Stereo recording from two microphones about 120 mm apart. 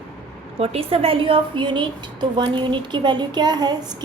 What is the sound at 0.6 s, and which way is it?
A woman's voice, 55° right (ahead or behind).